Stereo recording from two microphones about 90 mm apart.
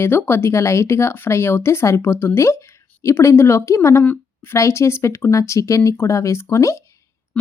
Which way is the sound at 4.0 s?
20° left (ahead or behind).